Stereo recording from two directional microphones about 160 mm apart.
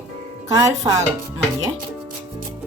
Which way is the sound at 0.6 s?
20° right (ahead or behind).